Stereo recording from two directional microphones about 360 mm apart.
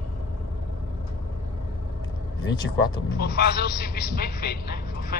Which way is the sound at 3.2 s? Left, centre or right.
Left.